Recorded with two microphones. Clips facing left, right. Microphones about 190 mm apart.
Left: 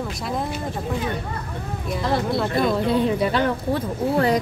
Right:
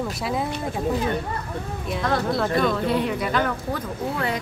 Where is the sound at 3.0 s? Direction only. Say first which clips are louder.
Left 3 dB; 30° left (ahead or behind).